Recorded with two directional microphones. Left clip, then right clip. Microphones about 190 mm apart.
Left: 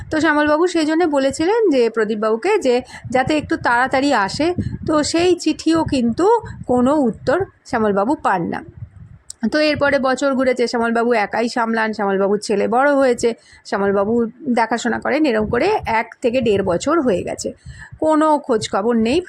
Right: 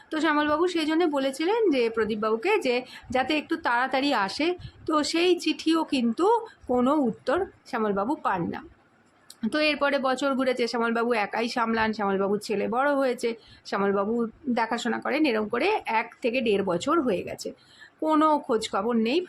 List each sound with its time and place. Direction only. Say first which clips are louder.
0.1 s a woman's voice: left 9 dB; 30° left (ahead or behind)